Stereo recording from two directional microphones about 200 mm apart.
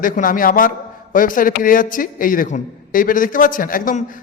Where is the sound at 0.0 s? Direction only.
45° left (ahead or behind).